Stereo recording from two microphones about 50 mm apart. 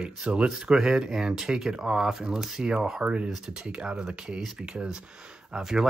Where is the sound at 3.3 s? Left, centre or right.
Centre.